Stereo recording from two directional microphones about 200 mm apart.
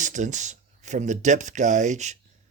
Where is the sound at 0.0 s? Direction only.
40° right (ahead or behind).